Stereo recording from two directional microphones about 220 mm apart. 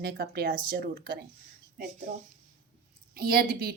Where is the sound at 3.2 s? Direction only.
45° right (ahead or behind).